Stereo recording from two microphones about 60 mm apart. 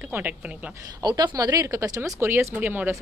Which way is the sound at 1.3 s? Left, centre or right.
Right.